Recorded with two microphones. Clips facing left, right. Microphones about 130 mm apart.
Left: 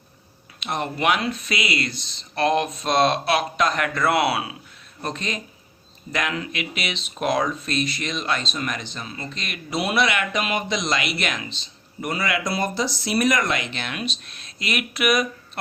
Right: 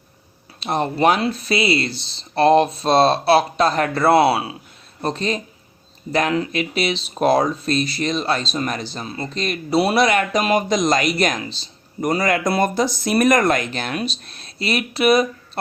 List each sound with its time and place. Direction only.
0.6 s speech: 35° right (ahead or behind)